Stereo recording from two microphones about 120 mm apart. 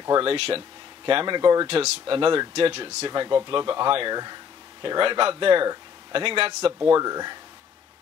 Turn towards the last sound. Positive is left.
turn(degrees=-30)  # may be behind; listen again after turning